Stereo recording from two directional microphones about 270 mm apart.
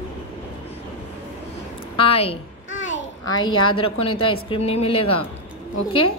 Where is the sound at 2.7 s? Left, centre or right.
Left.